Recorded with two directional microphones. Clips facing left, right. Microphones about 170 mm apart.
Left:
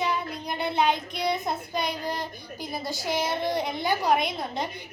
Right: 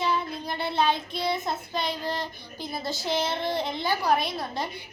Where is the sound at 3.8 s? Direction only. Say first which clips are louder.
Left 1 dB; 20° left (ahead or behind).